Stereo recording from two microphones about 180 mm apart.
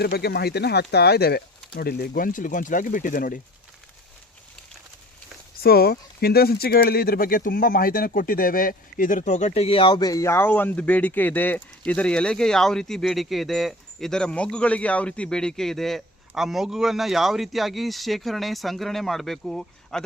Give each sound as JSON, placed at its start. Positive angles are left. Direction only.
{"t": 0.0, "sound": "speech", "side_deg": 65}
{"t": 5.6, "sound": "speech", "side_deg": 60}